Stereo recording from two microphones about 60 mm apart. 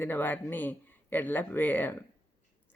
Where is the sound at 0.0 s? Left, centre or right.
Left.